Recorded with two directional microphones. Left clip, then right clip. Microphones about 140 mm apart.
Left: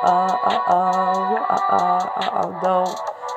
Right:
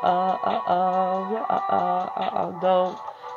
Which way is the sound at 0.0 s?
15° right (ahead or behind).